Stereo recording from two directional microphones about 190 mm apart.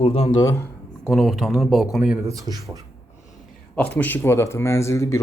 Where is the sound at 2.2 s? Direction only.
15° right (ahead or behind).